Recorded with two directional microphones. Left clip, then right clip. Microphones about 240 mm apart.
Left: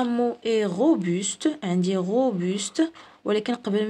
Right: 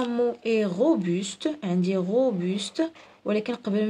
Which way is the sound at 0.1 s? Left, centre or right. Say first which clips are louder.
Left 1 dB; left.